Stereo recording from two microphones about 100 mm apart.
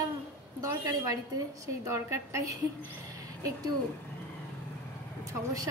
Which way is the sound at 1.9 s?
30° right (ahead or behind).